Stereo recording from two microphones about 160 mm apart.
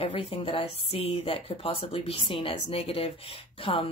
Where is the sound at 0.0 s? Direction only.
35° left (ahead or behind).